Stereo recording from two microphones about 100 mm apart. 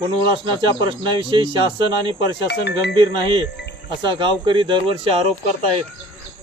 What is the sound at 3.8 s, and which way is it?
Speech, 50° right (ahead or behind).